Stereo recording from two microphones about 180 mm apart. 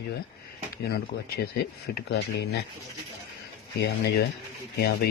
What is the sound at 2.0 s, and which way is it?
Speech, 65° left (ahead or behind).